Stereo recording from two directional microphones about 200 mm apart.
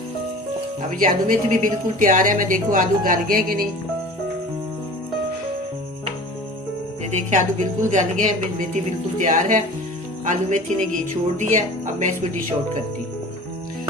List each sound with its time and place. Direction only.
0.9 s a woman's voice: 45° right (ahead or behind)
7.0 s a woman's voice: 35° right (ahead or behind)